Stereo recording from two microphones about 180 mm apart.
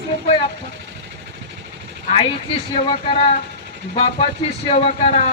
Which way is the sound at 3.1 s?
35° left (ahead or behind).